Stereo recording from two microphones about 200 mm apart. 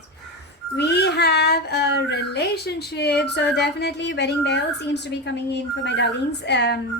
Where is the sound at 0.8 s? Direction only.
55° left (ahead or behind).